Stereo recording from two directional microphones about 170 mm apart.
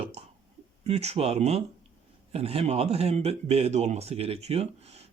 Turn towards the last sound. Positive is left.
turn(degrees=-40)  # may be behind; listen again after turning